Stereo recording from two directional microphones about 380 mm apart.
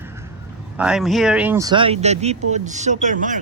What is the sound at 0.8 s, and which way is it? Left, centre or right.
Speech, centre.